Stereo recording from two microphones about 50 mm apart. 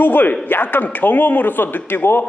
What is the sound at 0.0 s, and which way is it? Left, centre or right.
A man's voice, left.